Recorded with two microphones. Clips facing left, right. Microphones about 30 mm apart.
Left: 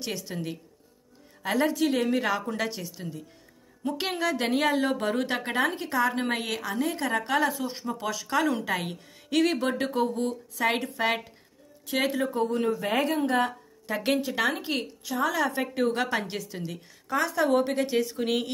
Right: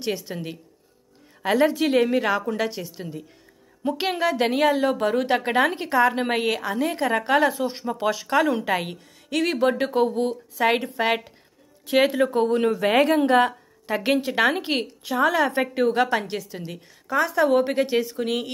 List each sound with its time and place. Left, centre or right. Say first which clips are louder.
0.0 s speech: right 5 dB; centre
1.4 s a woman's voice: right 5 dB; right
5.8 s a woman's voice: right 6 dB; right
8.3 s speech: right 4 dB; centre
10.9 s speech: right 4 dB; centre
12.3 s speech: right 5 dB; right
13.5 s a woman's voice: right 5 dB; right
18.0 s speech: right 2 dB; centre